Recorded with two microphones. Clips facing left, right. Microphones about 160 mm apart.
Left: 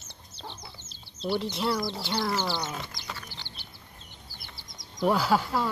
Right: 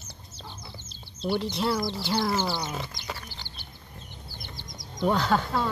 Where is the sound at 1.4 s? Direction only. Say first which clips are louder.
Right 2 dB; centre (ahead or behind).